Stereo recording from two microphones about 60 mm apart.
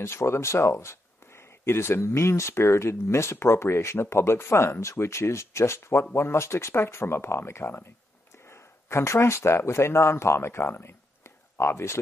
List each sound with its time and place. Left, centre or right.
0.0 s speech: left